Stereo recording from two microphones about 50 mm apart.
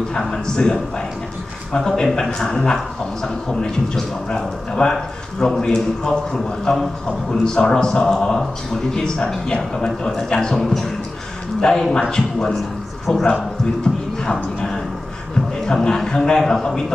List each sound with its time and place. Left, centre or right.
0.1 s a man's voice: centre
1.8 s a man's voice: centre
11.9 s a man's voice: centre
14.2 s a sound: centre
15.6 s a man's voice: centre